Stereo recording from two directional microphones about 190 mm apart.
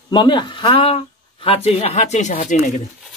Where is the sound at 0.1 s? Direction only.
25° left (ahead or behind).